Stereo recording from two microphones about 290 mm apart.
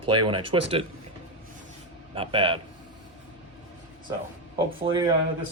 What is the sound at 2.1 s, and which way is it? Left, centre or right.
Speech, centre.